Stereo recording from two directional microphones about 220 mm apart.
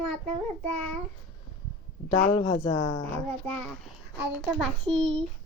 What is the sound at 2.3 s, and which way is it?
Speech, 20° left (ahead or behind).